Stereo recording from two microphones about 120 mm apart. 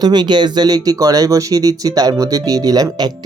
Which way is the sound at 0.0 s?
35° right (ahead or behind).